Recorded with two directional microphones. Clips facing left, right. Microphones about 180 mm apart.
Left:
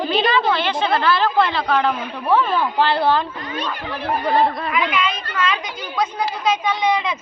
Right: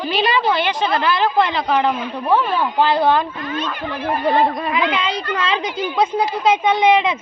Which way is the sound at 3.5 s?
15° left (ahead or behind).